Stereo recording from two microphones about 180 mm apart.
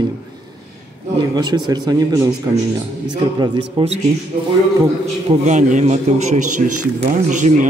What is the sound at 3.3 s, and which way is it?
Speech, 25° right (ahead or behind).